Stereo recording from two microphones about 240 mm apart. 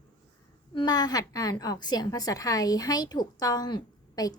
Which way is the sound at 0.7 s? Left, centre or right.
Centre.